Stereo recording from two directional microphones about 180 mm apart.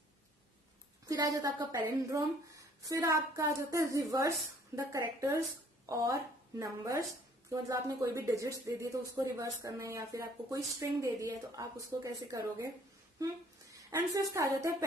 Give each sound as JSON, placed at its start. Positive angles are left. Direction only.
{"t": 1.0, "sound": "a woman's voice", "side_deg": -20}